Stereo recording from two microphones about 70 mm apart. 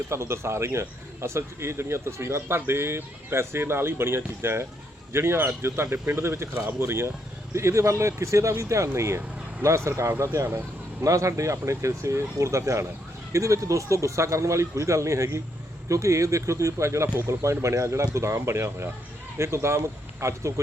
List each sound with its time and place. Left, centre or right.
0.1 s speech: right